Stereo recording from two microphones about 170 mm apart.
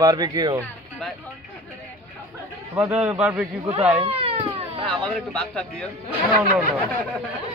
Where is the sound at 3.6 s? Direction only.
35° right (ahead or behind).